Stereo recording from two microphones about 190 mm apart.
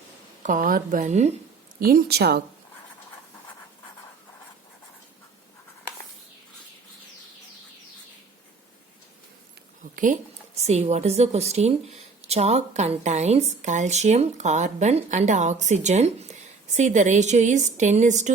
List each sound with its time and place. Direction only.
0.4 s speech: 45° right (ahead or behind)
1.8 s speech: 50° right (ahead or behind)
9.9 s a woman's voice: 40° right (ahead or behind)